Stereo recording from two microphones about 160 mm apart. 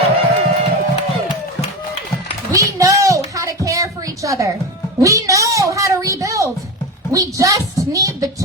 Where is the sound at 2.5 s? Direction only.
20° right (ahead or behind).